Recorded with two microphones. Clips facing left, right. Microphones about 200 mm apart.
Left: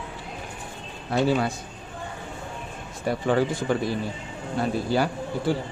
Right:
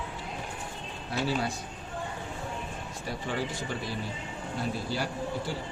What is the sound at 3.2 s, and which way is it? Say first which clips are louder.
Speech: left 10 dB; 60° left (ahead or behind).